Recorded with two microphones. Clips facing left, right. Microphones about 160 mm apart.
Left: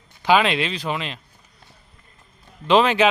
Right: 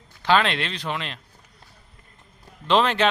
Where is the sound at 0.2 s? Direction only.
10° left (ahead or behind).